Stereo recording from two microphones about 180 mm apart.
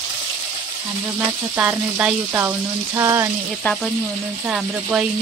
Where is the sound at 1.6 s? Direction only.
5° right (ahead or behind).